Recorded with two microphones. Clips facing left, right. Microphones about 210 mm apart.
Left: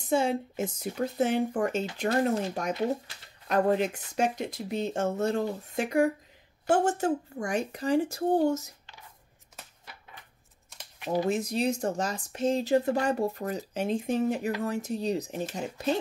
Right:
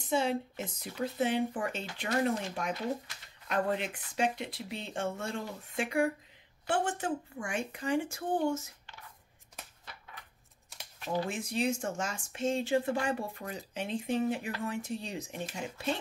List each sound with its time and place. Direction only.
0.1 s speech: 50° left (ahead or behind)
11.2 s speech: 40° left (ahead or behind)